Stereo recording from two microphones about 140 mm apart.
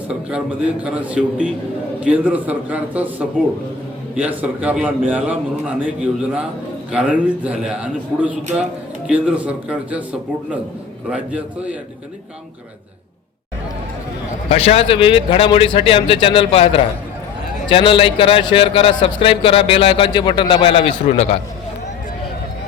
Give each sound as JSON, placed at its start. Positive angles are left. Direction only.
{"t": 0.1, "sound": "a man's voice", "side_deg": -5}
{"t": 14.5, "sound": "a man's voice", "side_deg": 45}